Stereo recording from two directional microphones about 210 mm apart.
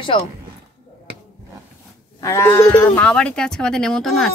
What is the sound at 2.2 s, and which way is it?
Speech, 15° left (ahead or behind).